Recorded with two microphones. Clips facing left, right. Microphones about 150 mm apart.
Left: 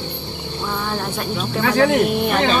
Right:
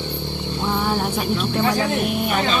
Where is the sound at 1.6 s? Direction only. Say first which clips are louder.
Left 7 dB; 80° left.